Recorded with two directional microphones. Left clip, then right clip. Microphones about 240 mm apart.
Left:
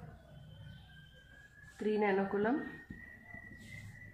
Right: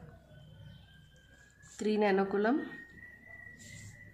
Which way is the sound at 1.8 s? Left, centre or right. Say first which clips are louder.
Right 3 dB; right.